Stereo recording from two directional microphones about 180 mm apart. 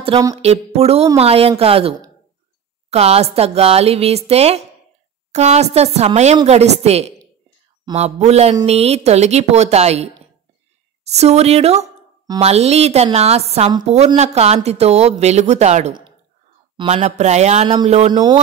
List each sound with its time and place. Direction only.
0.7 s speech: 35° right (ahead or behind)
11.1 s speech: 35° right (ahead or behind)